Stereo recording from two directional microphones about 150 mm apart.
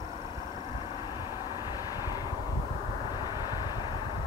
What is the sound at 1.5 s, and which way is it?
Vehicle, 30° left (ahead or behind).